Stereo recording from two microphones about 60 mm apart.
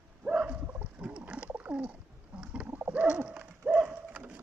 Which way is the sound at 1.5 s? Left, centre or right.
Right.